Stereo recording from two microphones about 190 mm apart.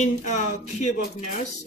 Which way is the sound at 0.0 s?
40° left (ahead or behind).